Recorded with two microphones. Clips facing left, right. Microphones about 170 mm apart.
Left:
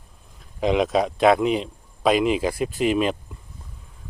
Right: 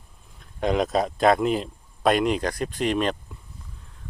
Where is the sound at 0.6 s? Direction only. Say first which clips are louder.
Left 2 dB; centre (ahead or behind).